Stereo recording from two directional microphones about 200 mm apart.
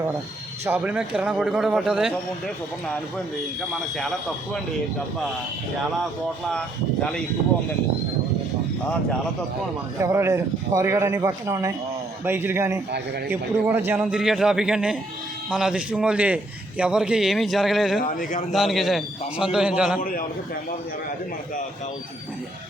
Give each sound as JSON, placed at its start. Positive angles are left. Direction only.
{"t": 0.6, "sound": "a man's voice", "side_deg": -10}
{"t": 6.5, "sound": "a man's voice", "side_deg": 5}
{"t": 10.0, "sound": "a man's voice", "side_deg": -15}
{"t": 18.0, "sound": "speech", "side_deg": 40}
{"t": 18.5, "sound": "a man's voice", "side_deg": 0}
{"t": 20.0, "sound": "a man's voice", "side_deg": 45}